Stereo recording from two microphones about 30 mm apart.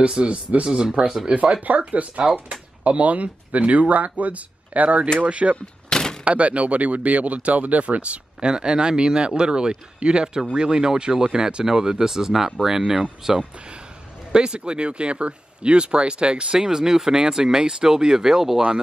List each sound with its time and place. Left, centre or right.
0.2 s speech: right
1.6 s speech: right
5.9 s a sound: left
6.2 s speech: right
8.5 s speech: right
16.5 s speech: right